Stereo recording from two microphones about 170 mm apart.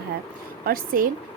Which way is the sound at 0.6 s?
60° right (ahead or behind).